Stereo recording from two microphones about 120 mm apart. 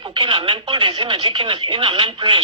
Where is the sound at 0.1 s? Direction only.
45° right (ahead or behind).